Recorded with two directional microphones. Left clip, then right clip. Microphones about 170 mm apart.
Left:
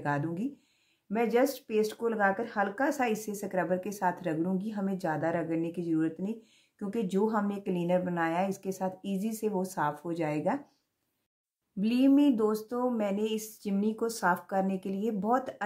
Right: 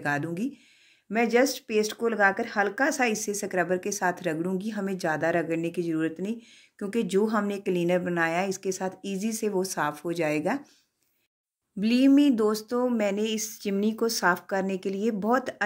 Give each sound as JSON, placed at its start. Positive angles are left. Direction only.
{"t": 0.0, "sound": "speech", "side_deg": -20}
{"t": 11.8, "sound": "speech", "side_deg": -15}